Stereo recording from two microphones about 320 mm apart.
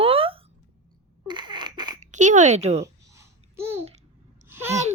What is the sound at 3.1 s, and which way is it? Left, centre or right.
Babbling, centre.